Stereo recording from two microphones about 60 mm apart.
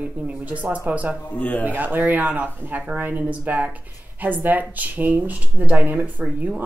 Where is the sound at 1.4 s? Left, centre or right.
Left.